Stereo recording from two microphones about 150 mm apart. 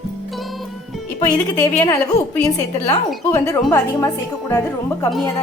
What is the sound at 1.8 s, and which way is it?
A woman's voice, 25° left (ahead or behind).